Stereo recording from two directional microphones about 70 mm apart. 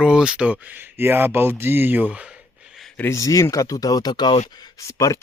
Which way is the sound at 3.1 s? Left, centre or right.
Left.